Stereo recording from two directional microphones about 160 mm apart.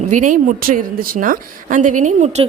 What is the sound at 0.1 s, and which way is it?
A woman's voice, 50° right (ahead or behind).